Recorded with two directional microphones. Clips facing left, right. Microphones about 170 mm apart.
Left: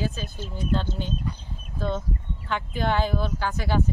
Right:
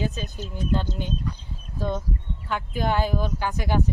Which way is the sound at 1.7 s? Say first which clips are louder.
Even; 15° right (ahead or behind).